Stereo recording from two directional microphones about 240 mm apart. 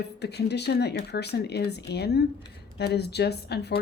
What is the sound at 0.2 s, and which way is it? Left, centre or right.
A woman's voice, left.